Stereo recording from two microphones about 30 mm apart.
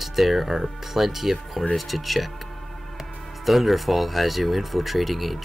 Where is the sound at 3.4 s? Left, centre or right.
Centre.